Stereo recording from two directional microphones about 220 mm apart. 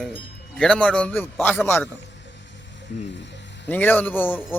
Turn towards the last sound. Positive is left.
turn(degrees=10)  # may be behind; listen again after turning